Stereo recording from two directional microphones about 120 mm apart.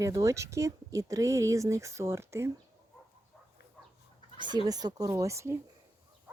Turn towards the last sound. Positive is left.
turn(degrees=-25)  # may be behind; listen again after turning